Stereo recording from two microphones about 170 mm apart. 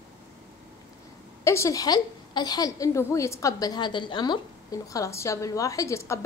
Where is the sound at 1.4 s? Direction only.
15° left (ahead or behind).